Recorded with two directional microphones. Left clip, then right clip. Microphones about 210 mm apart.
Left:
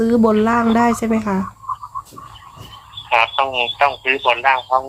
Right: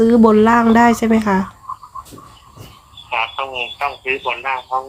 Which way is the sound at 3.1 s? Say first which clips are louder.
Left 5 dB; 40° left (ahead or behind).